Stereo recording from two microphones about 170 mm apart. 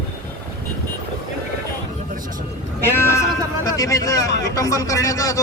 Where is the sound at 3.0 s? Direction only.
15° left (ahead or behind).